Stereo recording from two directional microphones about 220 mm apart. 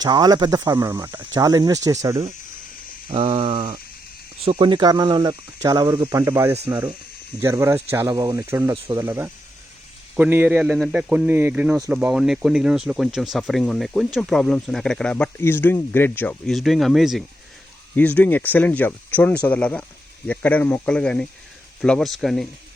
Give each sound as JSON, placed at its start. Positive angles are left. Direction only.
{"t": 0.0, "sound": "speech", "side_deg": -20}
{"t": 3.1, "sound": "speech", "side_deg": -25}